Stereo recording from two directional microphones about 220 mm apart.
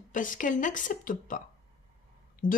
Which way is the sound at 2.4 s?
35° left (ahead or behind).